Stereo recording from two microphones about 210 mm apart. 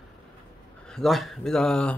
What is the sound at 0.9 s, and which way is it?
Speech, centre (ahead or behind).